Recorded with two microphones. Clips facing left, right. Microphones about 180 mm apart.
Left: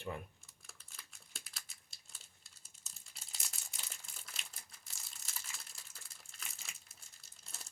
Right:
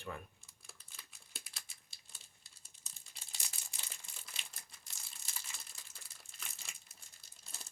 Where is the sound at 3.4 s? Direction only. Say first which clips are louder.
Even; centre (ahead or behind).